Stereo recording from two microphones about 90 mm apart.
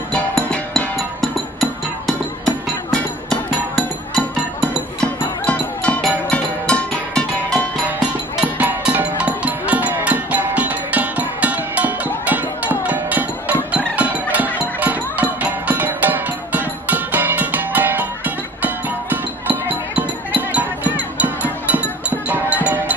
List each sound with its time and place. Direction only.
0.1 s music: 10° left (ahead or behind)
5.0 s music: 15° left (ahead or behind)
8.5 s music: 15° right (ahead or behind)